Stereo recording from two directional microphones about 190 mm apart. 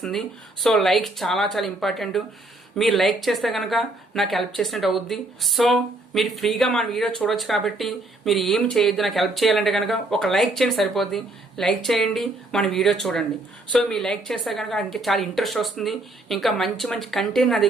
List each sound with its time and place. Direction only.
0.0 s speech: centre (ahead or behind)